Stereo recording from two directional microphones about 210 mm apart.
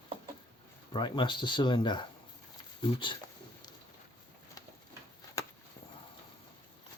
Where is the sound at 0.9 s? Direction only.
20° left (ahead or behind).